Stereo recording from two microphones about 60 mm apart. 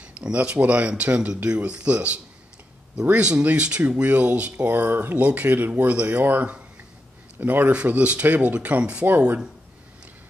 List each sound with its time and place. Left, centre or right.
0.0 s speech: right